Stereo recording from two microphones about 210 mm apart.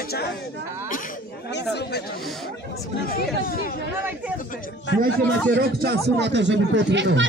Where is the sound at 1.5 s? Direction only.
50° left (ahead or behind).